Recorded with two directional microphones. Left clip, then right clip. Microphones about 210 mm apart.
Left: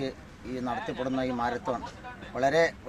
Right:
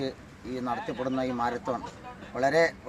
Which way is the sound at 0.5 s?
Centre (ahead or behind).